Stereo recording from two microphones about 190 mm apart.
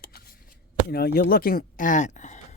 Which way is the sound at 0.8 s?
55° left (ahead or behind).